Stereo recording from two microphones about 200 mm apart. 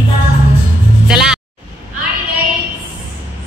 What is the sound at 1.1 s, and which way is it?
Speech, 5° right (ahead or behind).